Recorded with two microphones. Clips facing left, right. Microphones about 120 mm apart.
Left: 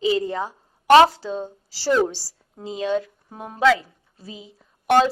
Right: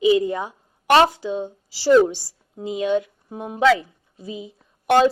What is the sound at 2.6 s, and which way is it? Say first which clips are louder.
Speech: right 3 dB; 35° left (ahead or behind).